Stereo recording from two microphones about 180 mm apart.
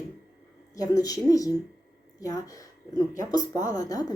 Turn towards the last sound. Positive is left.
turn(degrees=20)  # may be behind; listen again after turning